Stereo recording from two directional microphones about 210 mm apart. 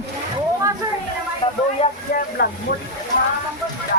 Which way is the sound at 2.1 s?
45° left (ahead or behind).